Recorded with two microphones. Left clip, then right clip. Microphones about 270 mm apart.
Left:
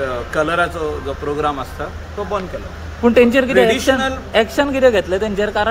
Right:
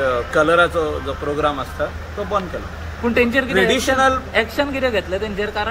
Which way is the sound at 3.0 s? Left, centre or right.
Left.